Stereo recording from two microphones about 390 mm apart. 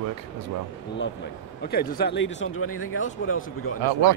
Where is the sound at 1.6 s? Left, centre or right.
Left.